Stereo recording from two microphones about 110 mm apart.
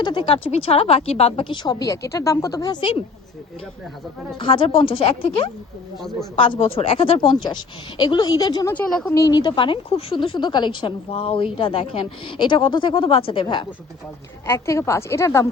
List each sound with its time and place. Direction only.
0.0 s a woman's voice: 45° left (ahead or behind)
0.4 s speech: 60° left (ahead or behind)
1.6 s speech: 35° left (ahead or behind)
4.4 s a woman's voice: 50° left (ahead or behind)
14.4 s a woman's voice: 25° left (ahead or behind)